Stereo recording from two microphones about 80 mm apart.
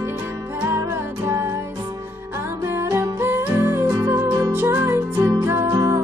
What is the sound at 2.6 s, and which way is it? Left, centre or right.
Music, right.